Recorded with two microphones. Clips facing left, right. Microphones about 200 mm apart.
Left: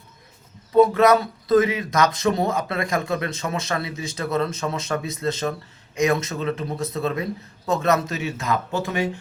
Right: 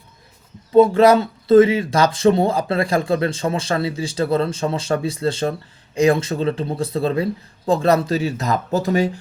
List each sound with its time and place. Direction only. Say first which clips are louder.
0.7 s speech: right 4 dB; 30° right (ahead or behind)